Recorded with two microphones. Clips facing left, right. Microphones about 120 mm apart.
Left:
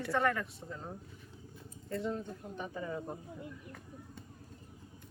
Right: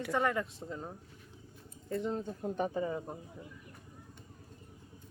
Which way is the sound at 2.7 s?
25° right (ahead or behind).